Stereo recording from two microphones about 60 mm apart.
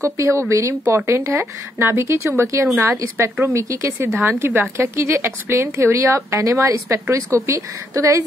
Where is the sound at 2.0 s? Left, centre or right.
Right.